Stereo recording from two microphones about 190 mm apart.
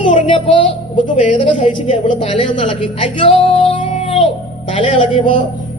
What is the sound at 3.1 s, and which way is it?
Music, 25° left (ahead or behind).